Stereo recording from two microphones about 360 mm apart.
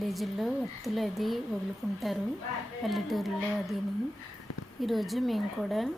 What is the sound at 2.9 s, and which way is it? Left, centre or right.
Speech, centre.